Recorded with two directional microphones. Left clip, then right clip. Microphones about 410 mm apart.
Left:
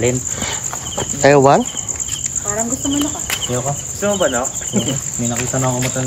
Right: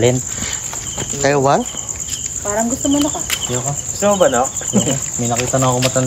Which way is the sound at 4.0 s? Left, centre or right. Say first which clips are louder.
Right 4 dB; right.